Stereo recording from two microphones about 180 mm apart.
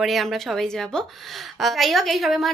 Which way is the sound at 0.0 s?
Centre (ahead or behind).